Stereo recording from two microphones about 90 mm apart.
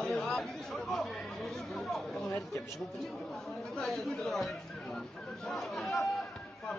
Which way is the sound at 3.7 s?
5° left (ahead or behind).